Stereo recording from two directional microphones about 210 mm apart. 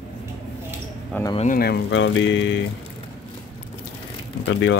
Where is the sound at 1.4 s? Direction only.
45° left (ahead or behind); by 2.6 s 60° left (ahead or behind).